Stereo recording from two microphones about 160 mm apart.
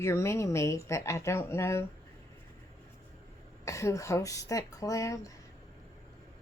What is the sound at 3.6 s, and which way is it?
Speech, 20° left (ahead or behind).